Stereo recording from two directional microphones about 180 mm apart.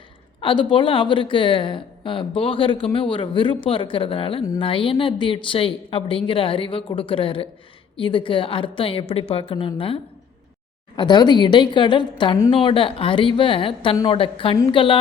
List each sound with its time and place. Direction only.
0.4 s speech: 25° left (ahead or behind)